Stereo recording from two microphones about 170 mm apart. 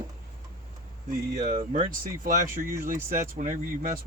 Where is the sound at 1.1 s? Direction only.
55° right (ahead or behind).